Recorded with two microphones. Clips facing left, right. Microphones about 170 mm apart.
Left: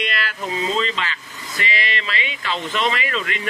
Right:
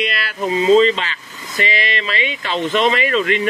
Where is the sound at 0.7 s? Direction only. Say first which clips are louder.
Right 10 dB; 25° right (ahead or behind).